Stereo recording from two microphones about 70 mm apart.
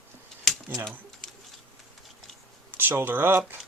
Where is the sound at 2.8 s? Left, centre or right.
Right.